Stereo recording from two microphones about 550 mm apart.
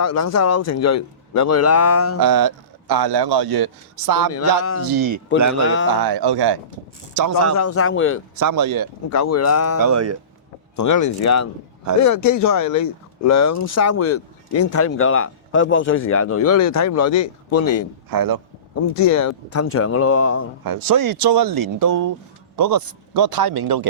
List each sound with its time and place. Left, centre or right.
0.0 s speech: left
2.1 s speech: right
4.3 s speech: left
4.9 s speech: right
5.6 s speech: left
6.0 s speech: right
7.5 s speech: left
8.4 s speech: right
9.0 s speech: left
9.8 s speech: right
10.8 s speech: left
18.1 s speech: right
18.9 s speech: left
20.7 s speech: right